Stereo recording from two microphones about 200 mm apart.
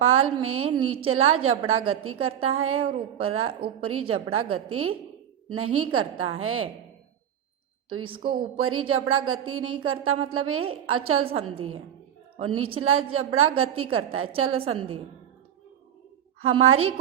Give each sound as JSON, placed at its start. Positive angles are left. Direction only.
{"t": 0.0, "sound": "a woman's voice", "side_deg": -90}
{"t": 7.9, "sound": "a woman's voice", "side_deg": -90}
{"t": 8.2, "sound": "speech", "side_deg": -25}
{"t": 8.5, "sound": "a woman's voice", "side_deg": -90}
{"t": 12.4, "sound": "a woman's voice", "side_deg": -90}
{"t": 16.4, "sound": "a woman's voice", "side_deg": -90}